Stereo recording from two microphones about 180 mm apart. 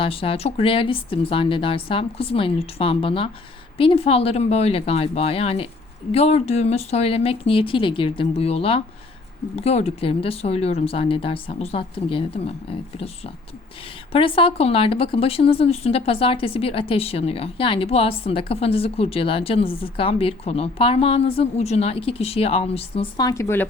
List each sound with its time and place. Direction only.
0.0 s a woman's voice: 30° left (ahead or behind)
14.1 s a woman's voice: 30° left (ahead or behind); by 23.6 s 15° left (ahead or behind)